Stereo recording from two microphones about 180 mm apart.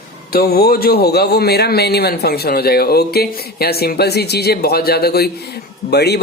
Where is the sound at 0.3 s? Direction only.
60° left (ahead or behind).